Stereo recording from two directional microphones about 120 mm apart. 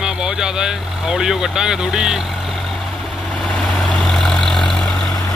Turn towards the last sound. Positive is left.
turn(degrees=5)  # may be behind; listen again after turning